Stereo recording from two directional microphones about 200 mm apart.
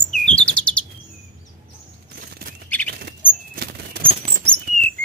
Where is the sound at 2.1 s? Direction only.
45° right (ahead or behind).